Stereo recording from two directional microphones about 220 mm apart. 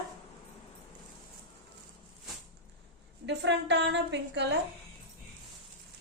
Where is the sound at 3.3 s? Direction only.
50° right (ahead or behind).